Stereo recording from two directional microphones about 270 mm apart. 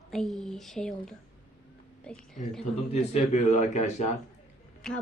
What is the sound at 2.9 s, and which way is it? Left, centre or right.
A man's voice, left.